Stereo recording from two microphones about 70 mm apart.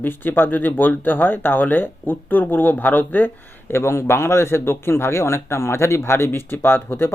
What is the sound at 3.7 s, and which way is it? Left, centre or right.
A man's voice, left.